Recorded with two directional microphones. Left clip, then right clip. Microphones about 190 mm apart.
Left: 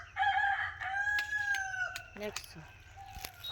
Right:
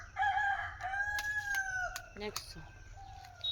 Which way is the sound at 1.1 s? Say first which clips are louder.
Left 2 dB; 20° right (ahead or behind).